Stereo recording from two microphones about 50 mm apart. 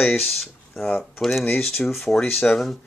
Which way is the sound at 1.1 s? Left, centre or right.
Centre.